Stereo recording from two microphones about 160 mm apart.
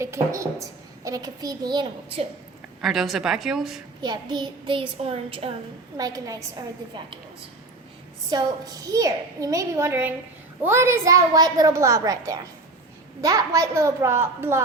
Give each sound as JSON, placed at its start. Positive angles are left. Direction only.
{"t": 0.0, "sound": "a woman's voice", "side_deg": -20}
{"t": 2.8, "sound": "a woman's voice", "side_deg": 0}
{"t": 4.0, "sound": "a child's voice", "side_deg": -25}
{"t": 6.0, "sound": "a woman's voice", "side_deg": -25}
{"t": 8.3, "sound": "a woman's voice", "side_deg": -25}